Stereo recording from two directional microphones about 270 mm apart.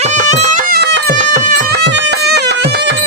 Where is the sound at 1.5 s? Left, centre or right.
Right.